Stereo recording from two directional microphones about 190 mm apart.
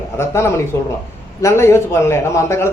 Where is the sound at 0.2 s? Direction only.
15° left (ahead or behind).